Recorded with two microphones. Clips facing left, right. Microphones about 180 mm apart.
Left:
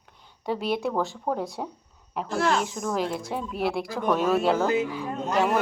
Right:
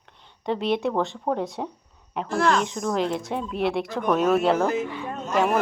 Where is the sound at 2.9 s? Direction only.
5° left (ahead or behind).